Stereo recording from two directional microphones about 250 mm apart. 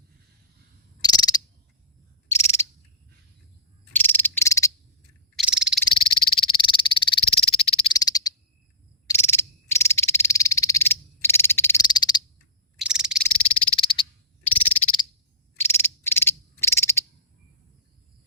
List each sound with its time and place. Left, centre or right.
1.0 s frog: centre
2.3 s owl: centre
3.9 s frog: centre
5.4 s frog: centre
5.9 s frog: left
12.8 s frog: centre
13.7 s frog: left
15.5 s frog: centre